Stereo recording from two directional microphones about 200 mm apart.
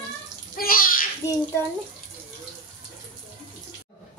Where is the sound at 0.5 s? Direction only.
45° left (ahead or behind).